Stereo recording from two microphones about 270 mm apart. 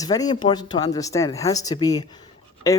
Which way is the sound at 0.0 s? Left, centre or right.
Centre.